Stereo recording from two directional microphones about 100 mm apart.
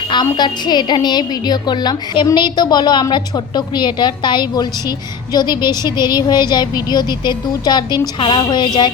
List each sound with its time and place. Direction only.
0.3 s a woman's voice: 45° left (ahead or behind)